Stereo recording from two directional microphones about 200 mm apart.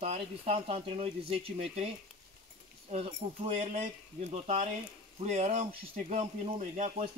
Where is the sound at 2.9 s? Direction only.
30° right (ahead or behind).